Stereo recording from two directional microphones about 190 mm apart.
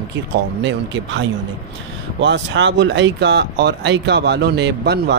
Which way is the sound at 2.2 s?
70° right (ahead or behind).